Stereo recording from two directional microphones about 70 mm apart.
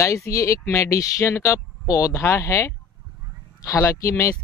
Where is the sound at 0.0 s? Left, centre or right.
Left.